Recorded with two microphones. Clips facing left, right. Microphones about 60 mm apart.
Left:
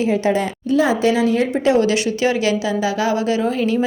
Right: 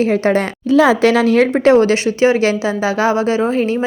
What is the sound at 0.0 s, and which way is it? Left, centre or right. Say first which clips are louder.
Speech: right 3 dB; right.